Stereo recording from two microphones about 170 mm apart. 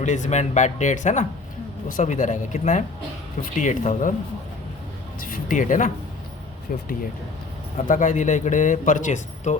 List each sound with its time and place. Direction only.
0.0 s speech: 45° left (ahead or behind)
5.2 s speech: 50° left (ahead or behind)
7.9 s speech: 50° left (ahead or behind)